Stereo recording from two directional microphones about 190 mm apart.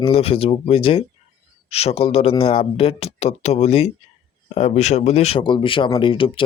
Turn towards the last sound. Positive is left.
turn(degrees=25)  # may be behind; listen again after turning